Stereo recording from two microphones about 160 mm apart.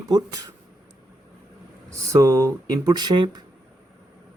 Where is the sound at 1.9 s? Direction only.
20° right (ahead or behind).